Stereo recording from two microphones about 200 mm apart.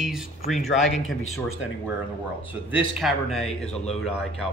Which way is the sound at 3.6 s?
30° left (ahead or behind).